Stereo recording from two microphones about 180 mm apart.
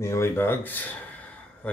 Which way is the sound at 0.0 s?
15° left (ahead or behind).